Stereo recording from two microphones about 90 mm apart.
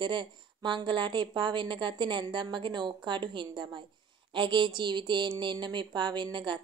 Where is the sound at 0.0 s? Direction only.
55° right (ahead or behind).